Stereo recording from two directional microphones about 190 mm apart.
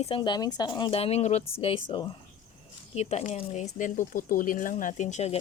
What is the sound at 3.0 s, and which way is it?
Speech, 35° left (ahead or behind).